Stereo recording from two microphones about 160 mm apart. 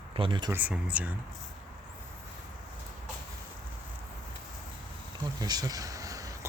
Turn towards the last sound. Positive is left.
turn(degrees=-20)  # may be behind; listen again after turning